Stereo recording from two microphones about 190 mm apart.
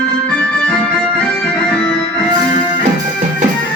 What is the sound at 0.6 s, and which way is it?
Music, 5° left (ahead or behind).